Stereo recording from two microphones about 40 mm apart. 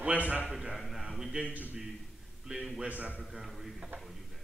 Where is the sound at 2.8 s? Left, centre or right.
Right.